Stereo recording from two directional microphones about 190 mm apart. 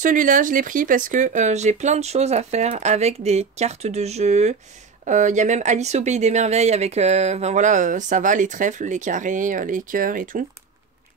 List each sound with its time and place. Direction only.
0.0 s speech: 45° right (ahead or behind)